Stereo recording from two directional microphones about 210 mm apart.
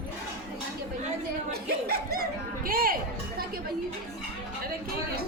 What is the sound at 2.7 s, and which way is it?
Music, 45° right (ahead or behind).